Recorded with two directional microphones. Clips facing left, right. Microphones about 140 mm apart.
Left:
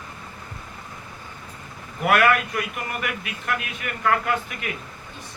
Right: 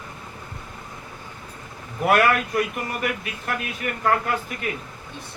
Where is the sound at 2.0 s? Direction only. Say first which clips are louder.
Even; 35° right (ahead or behind).